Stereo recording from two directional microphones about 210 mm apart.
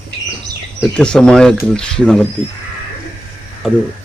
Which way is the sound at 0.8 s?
5° left (ahead or behind).